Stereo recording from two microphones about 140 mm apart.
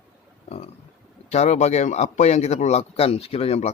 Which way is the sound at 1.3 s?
50° left (ahead or behind).